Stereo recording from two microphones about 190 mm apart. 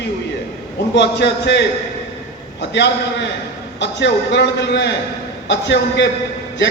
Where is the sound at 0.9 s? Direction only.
65° left (ahead or behind).